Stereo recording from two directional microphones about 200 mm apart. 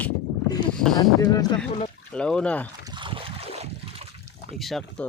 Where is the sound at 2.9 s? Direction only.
25° right (ahead or behind).